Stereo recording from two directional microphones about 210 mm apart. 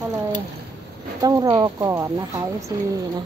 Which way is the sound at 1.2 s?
15° right (ahead or behind).